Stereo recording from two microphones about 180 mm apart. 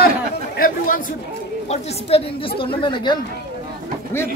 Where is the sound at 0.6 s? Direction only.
50° left (ahead or behind).